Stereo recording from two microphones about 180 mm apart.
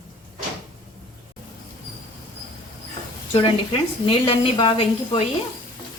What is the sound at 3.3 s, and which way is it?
Speech, 30° left (ahead or behind).